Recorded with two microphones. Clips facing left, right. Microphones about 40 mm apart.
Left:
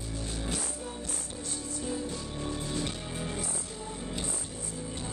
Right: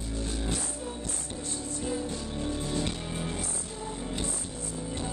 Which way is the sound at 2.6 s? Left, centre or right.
Centre.